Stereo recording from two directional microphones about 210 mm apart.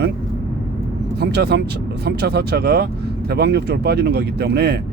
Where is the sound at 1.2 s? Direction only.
50° right (ahead or behind).